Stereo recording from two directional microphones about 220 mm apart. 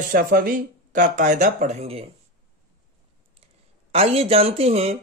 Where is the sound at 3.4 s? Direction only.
25° right (ahead or behind).